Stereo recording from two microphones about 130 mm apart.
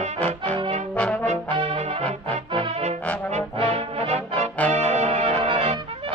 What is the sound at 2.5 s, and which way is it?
Music, 45° right (ahead or behind).